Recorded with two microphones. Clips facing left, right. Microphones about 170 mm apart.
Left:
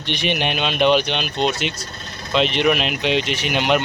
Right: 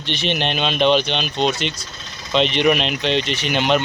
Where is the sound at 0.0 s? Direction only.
15° left (ahead or behind).